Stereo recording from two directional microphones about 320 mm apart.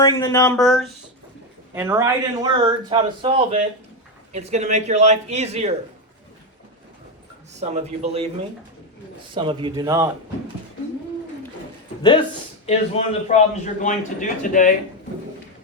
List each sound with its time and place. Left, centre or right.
0.0 s a man's voice: centre
7.6 s speech: centre
9.3 s a man's voice: centre
12.6 s a man's voice: left